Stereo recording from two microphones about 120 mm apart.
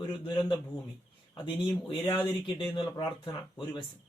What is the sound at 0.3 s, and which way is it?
Speech, 40° left (ahead or behind).